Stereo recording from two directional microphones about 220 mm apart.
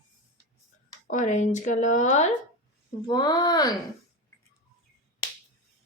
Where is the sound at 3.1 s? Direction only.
20° left (ahead or behind).